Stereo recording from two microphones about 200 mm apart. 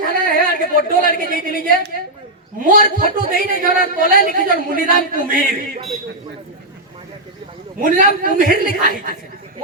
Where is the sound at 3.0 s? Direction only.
40° right (ahead or behind).